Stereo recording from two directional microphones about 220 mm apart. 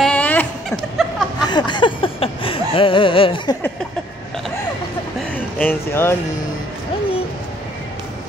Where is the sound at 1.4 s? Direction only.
20° left (ahead or behind).